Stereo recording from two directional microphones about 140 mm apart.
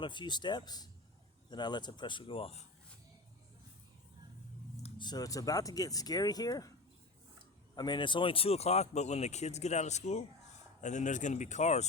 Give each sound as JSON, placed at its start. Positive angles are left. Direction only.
{"t": 0.0, "sound": "speech", "side_deg": 35}
{"t": 4.9, "sound": "speech", "side_deg": 30}
{"t": 7.8, "sound": "speech", "side_deg": 35}